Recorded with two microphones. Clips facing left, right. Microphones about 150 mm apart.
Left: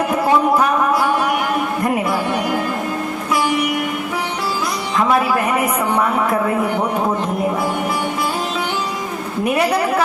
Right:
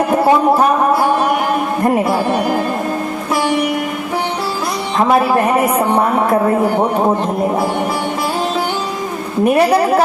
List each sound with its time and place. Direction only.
0.1 s a sound: 30° right (ahead or behind)
1.8 s a man's voice: 35° right (ahead or behind)
4.9 s a man's voice: 30° right (ahead or behind)
9.4 s a man's voice: 35° right (ahead or behind)